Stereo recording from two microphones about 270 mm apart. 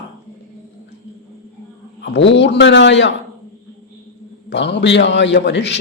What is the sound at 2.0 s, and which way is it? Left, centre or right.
A man's voice, left.